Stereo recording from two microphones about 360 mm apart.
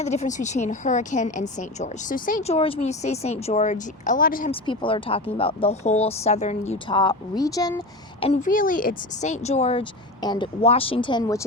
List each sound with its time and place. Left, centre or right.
0.0 s a woman's voice: centre